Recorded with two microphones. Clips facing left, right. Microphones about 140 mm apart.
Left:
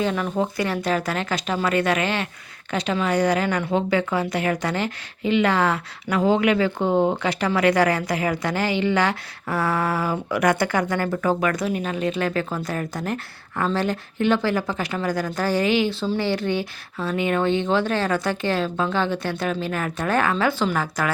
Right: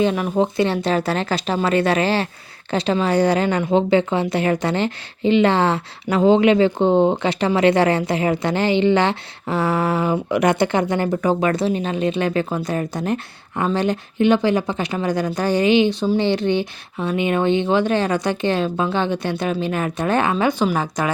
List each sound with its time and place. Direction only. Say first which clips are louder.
0.0 s a woman's voice: right 5 dB; 20° right (ahead or behind)